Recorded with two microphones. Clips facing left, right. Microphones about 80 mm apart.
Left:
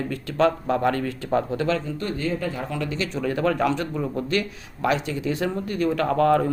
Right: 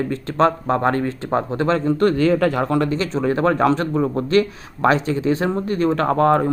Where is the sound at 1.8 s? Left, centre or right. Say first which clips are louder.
Right 11 dB; right.